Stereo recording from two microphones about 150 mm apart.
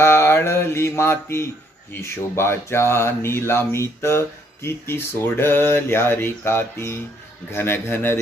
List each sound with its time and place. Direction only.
0.0 s mantra: 15° left (ahead or behind)
2.0 s speech: 15° left (ahead or behind)